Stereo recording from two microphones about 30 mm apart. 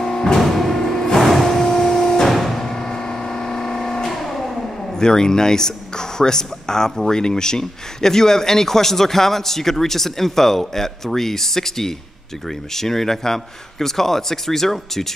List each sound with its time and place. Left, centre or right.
0.4 s music: centre
0.7 s music: centre
1.2 s vehicle: centre
2.2 s music: centre
2.6 s vehicle: centre
4.9 s speech: left